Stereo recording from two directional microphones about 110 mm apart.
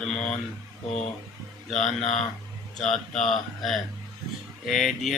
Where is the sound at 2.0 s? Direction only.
90° left.